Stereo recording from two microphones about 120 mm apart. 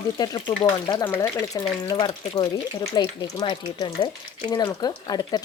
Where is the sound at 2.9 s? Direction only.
35° left (ahead or behind).